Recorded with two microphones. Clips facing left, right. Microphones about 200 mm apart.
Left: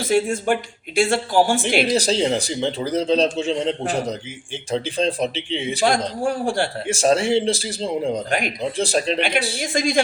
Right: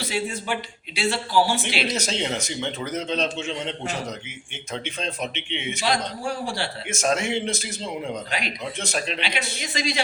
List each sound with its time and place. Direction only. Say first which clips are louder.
0.0 s speech: left 9 dB; 50° left (ahead or behind)
1.9 s a man's voice: left 8 dB; 35° left (ahead or behind)
6.2 s speech: left 7 dB; 50° left (ahead or behind)
6.8 s a man's voice: left 6 dB; 30° left (ahead or behind)
8.3 s speech: left 7 dB; 50° left (ahead or behind)
8.6 s a man's voice: left 8 dB; 30° left (ahead or behind)
9.6 s speech: left 7 dB; 50° left (ahead or behind)